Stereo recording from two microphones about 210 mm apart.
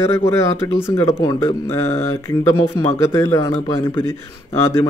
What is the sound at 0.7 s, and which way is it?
Speech, 10° left (ahead or behind).